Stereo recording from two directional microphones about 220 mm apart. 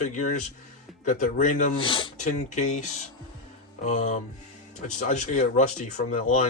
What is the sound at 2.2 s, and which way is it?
Speech, 35° left (ahead or behind).